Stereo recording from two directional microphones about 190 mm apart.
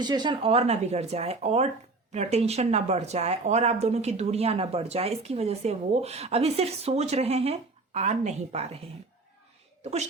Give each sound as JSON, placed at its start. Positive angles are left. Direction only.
{"t": 0.0, "sound": "a woman's voice", "side_deg": -25}
{"t": 9.8, "sound": "speech", "side_deg": -35}